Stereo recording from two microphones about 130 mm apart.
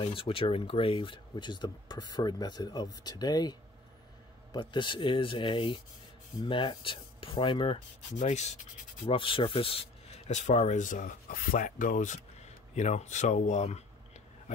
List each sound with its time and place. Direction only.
0.0 s speech: 45° left (ahead or behind); by 8.5 s 60° left (ahead or behind)
9.0 s speech: 45° left (ahead or behind); by 13.8 s 60° left (ahead or behind)